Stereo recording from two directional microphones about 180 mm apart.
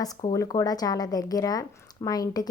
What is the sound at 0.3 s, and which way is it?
Speech, 20° left (ahead or behind).